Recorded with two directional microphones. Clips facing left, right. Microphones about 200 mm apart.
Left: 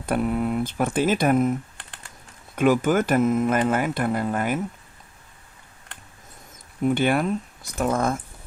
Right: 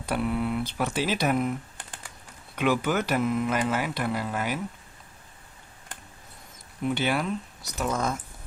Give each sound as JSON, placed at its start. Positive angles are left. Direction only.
{"t": 0.0, "sound": "speech", "side_deg": 50}
{"t": 2.6, "sound": "speech", "side_deg": 45}
{"t": 6.8, "sound": "speech", "side_deg": 50}